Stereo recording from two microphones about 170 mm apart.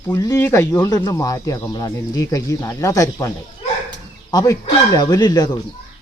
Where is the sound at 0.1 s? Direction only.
20° left (ahead or behind).